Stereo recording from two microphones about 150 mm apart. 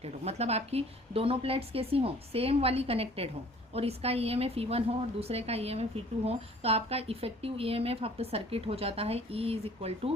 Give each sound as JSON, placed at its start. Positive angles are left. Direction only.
{"t": 0.0, "sound": "a woman's voice", "side_deg": -45}